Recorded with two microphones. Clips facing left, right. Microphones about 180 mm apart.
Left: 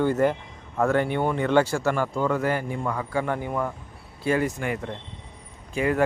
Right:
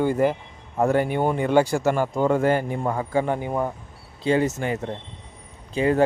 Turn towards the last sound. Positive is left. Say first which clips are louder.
# right 3 dB
turn(degrees=-30)  # may be behind; listen again after turning